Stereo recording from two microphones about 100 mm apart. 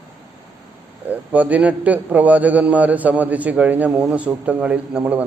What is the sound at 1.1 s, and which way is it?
A man's voice, 15° right (ahead or behind).